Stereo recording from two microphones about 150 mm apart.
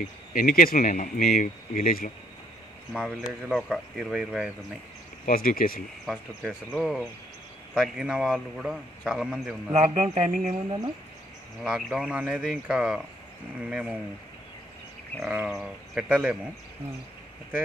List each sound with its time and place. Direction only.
0.0 s speech: 65° left (ahead or behind)
2.9 s a man's voice: 5° right (ahead or behind)
5.2 s speech: 70° left (ahead or behind)
6.0 s a man's voice: centre (ahead or behind)
9.7 s speech: 45° right (ahead or behind)
11.6 s a man's voice: 5° right (ahead or behind)
15.3 s a man's voice: 5° right (ahead or behind)